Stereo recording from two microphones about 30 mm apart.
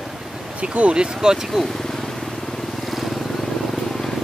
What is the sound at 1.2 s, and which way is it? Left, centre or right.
Speech, right.